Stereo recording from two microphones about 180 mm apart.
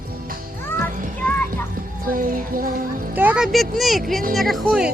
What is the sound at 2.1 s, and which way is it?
Music, 50° right (ahead or behind).